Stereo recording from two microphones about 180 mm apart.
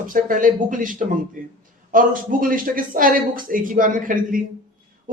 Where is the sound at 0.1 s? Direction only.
50° right (ahead or behind).